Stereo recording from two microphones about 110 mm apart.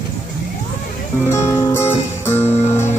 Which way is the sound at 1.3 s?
25° left (ahead or behind).